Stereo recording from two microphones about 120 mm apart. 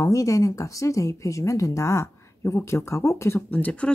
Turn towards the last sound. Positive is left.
turn(degrees=10)  # may be behind; listen again after turning